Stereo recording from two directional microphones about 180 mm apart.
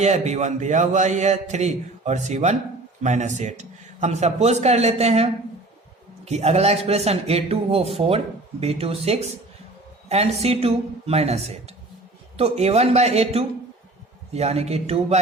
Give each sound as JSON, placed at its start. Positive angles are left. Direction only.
{"t": 0.0, "sound": "a man's voice", "side_deg": -40}